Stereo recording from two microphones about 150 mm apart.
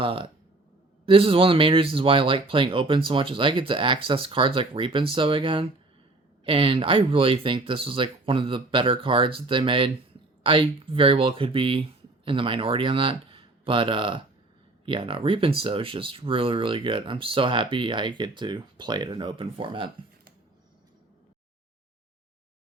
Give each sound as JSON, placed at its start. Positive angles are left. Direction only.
{"t": 0.0, "sound": "speech", "side_deg": -35}